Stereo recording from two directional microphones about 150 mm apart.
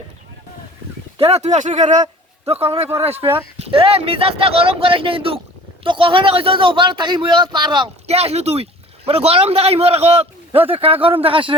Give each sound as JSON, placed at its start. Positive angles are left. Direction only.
{"t": 1.2, "sound": "speech", "side_deg": -45}
{"t": 2.5, "sound": "a man's voice", "side_deg": -40}
{"t": 8.0, "sound": "a man's voice", "side_deg": -45}